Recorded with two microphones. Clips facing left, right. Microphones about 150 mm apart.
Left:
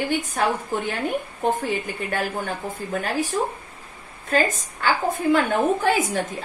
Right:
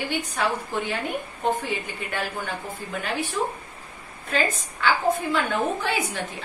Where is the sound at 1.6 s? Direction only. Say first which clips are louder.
Left 4 dB; 45° left (ahead or behind).